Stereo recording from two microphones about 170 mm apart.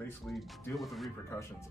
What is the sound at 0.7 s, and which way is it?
Speech, centre (ahead or behind).